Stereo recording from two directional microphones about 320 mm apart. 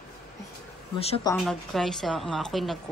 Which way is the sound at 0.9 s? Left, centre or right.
Centre.